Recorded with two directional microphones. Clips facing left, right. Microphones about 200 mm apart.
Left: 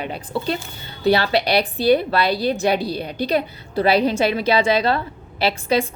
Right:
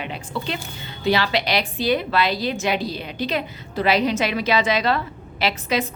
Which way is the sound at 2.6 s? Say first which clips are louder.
Left 4 dB; 40° left (ahead or behind).